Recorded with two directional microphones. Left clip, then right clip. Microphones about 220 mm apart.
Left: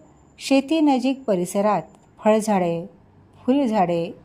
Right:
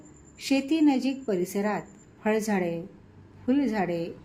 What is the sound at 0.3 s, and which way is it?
A woman's voice, 35° left (ahead or behind).